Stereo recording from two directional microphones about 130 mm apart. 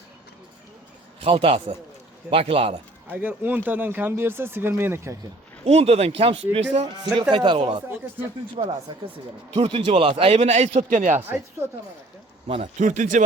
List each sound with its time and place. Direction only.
1.2 s speech: 45° right (ahead or behind)
3.1 s speech: 15° right (ahead or behind)
5.6 s speech: 55° right (ahead or behind); by 7.9 s 40° right (ahead or behind)
8.6 s speech: 50° right (ahead or behind); by 11.2 s 75° right (ahead or behind)
11.2 s speech: 15° right (ahead or behind)
12.8 s speech: 75° right (ahead or behind)